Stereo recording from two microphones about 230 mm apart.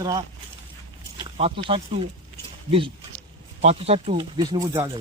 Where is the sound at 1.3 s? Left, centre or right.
Right.